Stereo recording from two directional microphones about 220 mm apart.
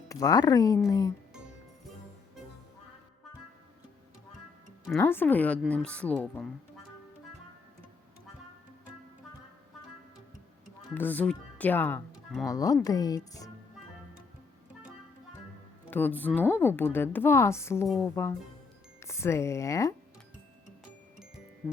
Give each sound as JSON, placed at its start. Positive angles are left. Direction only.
{"t": 0.1, "sound": "a woman's voice", "side_deg": 15}
{"t": 4.9, "sound": "a woman's voice", "side_deg": 10}
{"t": 10.9, "sound": "a woman's voice", "side_deg": 10}
{"t": 15.9, "sound": "a woman's voice", "side_deg": 10}